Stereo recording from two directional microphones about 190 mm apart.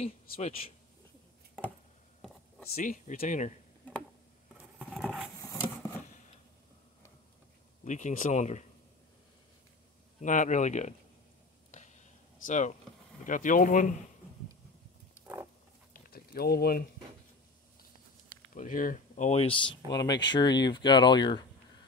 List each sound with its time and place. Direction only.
0.0 s speech: 35° left (ahead or behind)
2.7 s speech: 40° left (ahead or behind)
4.7 s patter: centre (ahead or behind)
7.8 s speech: 40° left (ahead or behind)
10.2 s speech: 40° left (ahead or behind)
12.4 s speech: 40° left (ahead or behind)
15.9 s a sound: 50° left (ahead or behind)
18.5 s speech: 45° left (ahead or behind); by 21.5 s 20° left (ahead or behind)